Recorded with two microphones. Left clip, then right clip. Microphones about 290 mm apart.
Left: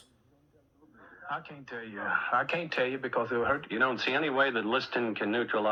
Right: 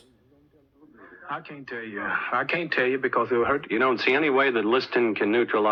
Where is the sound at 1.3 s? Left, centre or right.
Right.